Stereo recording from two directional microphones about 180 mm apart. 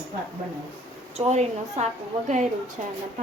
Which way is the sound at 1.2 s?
35° right (ahead or behind).